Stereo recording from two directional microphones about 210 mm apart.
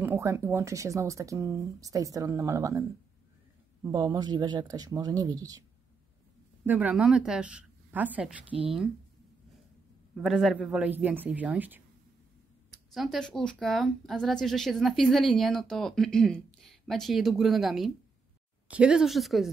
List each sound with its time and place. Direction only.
0.0 s speech: 10° right (ahead or behind)
3.9 s speech: 20° right (ahead or behind)
6.6 s speech: 10° right (ahead or behind)
10.2 s speech: centre (ahead or behind)
12.9 s a woman's voice: centre (ahead or behind)